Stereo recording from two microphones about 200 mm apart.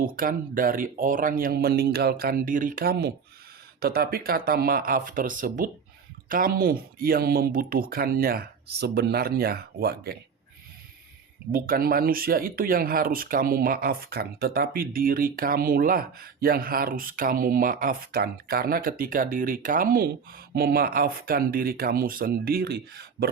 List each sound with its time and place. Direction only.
0.0 s speech: 45° right (ahead or behind)
11.5 s speech: 45° right (ahead or behind)